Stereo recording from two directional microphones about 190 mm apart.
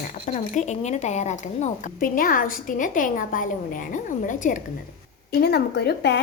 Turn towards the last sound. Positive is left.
turn(degrees=60)  # may be behind; listen again after turning